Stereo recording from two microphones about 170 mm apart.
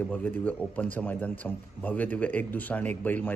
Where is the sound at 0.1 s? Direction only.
10° left (ahead or behind).